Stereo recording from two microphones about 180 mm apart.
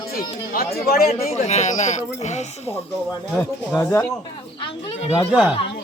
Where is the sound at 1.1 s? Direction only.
40° left (ahead or behind).